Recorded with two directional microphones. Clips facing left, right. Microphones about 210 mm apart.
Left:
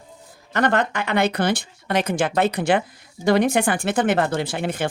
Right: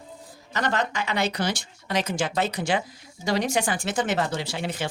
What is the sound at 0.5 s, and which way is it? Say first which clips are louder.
Speech: left 6 dB; 55° left (ahead or behind).